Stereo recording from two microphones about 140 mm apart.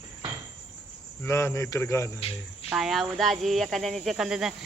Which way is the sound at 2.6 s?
Centre (ahead or behind).